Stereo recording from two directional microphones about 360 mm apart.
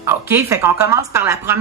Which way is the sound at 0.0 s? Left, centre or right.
Centre.